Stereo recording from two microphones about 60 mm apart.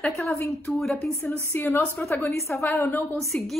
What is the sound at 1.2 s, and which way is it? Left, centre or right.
A woman's voice, left.